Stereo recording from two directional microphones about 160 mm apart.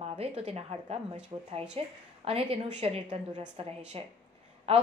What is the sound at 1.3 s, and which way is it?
Speech, 25° right (ahead or behind).